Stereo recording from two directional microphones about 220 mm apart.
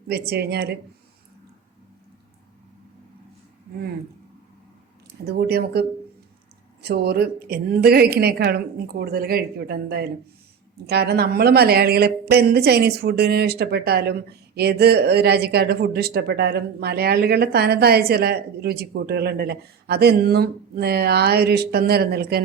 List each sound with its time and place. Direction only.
0.1 s a woman's voice: 45° right (ahead or behind)
5.2 s a woman's voice: 45° right (ahead or behind)
6.8 s a woman's voice: 45° right (ahead or behind)